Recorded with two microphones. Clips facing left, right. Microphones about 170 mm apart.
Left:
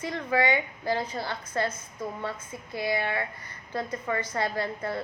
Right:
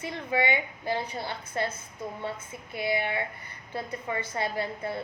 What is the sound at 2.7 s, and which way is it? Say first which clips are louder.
A woman's voice: even; 20° right (ahead or behind).